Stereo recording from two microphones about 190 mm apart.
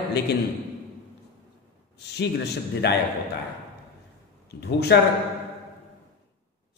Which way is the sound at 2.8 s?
60° left (ahead or behind).